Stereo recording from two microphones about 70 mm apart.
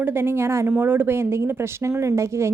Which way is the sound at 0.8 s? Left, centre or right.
Right.